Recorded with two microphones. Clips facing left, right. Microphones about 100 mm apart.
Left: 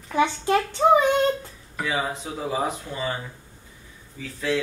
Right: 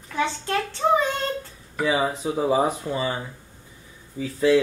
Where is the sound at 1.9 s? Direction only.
15° right (ahead or behind).